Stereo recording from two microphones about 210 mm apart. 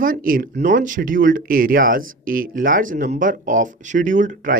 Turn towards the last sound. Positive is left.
turn(degrees=-35)  # may be behind; listen again after turning